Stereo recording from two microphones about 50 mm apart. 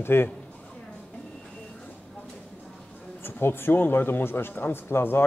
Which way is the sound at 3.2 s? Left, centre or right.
Left.